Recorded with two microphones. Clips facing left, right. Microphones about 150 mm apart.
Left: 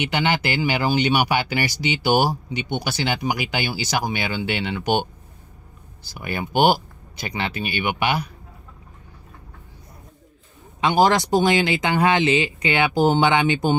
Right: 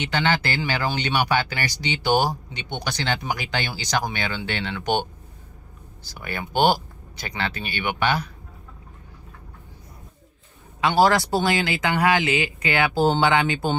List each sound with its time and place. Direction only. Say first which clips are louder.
0.0 s speech: left 1 dB; 15° left (ahead or behind)
6.1 s speech: left 3 dB; 15° left (ahead or behind)
10.8 s speech: left 1 dB; 20° left (ahead or behind)